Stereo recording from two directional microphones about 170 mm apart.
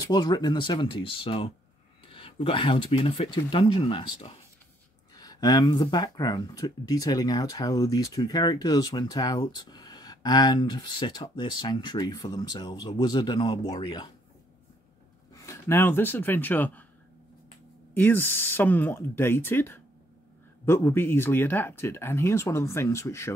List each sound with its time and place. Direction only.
0.0 s speech: 25° left (ahead or behind)
5.1 s speech: 20° left (ahead or behind)
15.4 s speech: 15° left (ahead or behind)
17.9 s speech: 10° left (ahead or behind)